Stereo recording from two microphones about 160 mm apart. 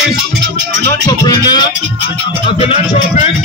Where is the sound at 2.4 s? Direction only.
35° left (ahead or behind).